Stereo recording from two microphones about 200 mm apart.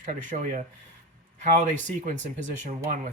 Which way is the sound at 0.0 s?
40° right (ahead or behind).